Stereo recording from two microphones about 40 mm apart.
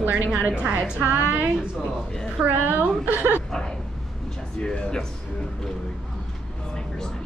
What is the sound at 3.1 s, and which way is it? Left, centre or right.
Speech, right.